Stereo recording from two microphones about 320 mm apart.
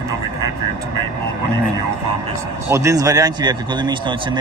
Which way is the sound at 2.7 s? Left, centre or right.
Centre.